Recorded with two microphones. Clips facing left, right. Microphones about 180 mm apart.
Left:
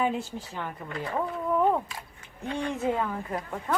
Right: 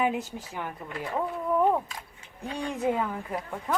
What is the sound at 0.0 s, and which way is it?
Speech, 15° right (ahead or behind).